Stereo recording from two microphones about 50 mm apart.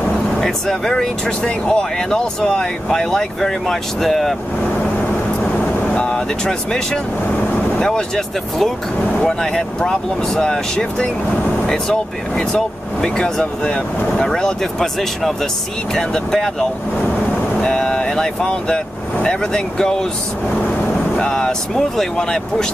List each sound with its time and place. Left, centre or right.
0.4 s speech: centre
5.4 s vehicle: left
9.2 s speech: centre
21.2 s speech: centre